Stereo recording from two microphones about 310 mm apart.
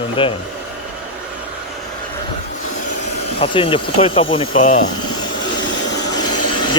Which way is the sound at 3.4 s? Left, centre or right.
Centre.